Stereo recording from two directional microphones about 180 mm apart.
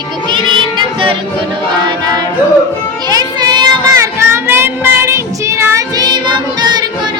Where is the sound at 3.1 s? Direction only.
20° right (ahead or behind).